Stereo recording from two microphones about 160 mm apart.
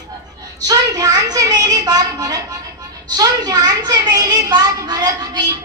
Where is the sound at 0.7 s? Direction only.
20° right (ahead or behind).